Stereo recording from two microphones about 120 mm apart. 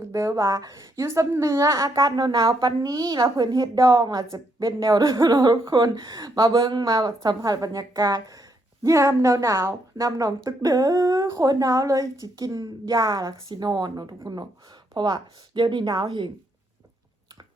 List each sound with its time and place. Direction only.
0.1 s a woman's voice: 25° right (ahead or behind)